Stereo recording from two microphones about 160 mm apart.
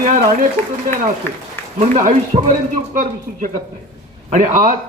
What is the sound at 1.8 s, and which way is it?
A man's voice, 50° right (ahead or behind).